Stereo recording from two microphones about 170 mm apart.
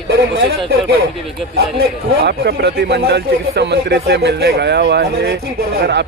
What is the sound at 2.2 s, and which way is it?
Speech, 75° right (ahead or behind).